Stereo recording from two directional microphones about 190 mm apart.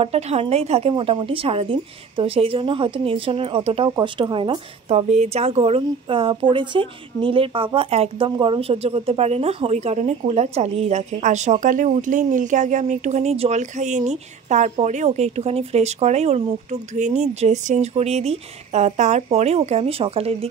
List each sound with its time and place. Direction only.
0.0 s a woman's voice: 35° right (ahead or behind)